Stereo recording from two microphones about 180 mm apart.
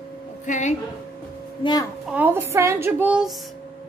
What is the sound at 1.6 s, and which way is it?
Speech, 20° left (ahead or behind).